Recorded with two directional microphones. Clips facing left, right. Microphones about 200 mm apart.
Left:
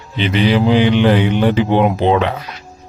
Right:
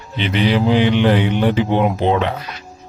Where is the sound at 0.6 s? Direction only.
90° left.